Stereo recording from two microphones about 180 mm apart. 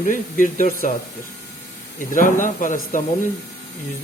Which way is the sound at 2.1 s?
45° left (ahead or behind).